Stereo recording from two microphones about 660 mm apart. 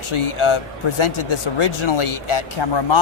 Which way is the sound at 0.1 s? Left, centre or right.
Left.